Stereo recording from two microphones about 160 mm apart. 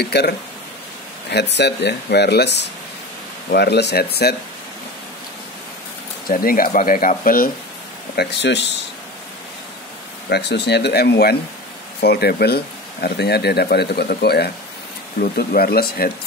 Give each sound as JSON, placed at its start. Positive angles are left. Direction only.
{"t": 0.0, "sound": "speech", "side_deg": 90}
{"t": 1.3, "sound": "speech", "side_deg": 90}
{"t": 6.2, "sound": "speech", "side_deg": 65}
{"t": 8.2, "sound": "speech", "side_deg": 90}
{"t": 10.3, "sound": "speech", "side_deg": 90}
{"t": 15.1, "sound": "speech", "side_deg": 65}